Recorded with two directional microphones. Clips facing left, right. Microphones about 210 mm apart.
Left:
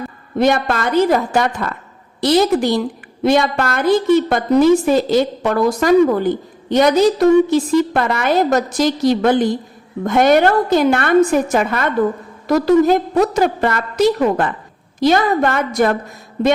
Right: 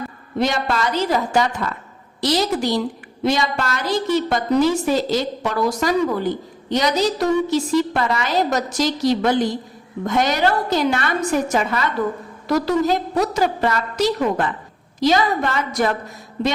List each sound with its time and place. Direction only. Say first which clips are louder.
0.3 s a woman's voice: left 5 dB; 55° left (ahead or behind)